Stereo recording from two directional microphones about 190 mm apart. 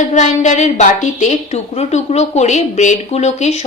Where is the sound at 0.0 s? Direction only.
40° left (ahead or behind).